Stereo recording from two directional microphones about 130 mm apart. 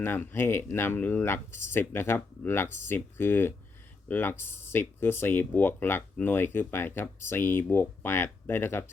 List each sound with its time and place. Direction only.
0.0 s speech: 15° left (ahead or behind)